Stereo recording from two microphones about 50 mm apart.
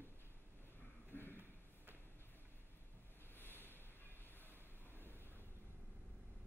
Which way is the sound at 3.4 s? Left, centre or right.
Left.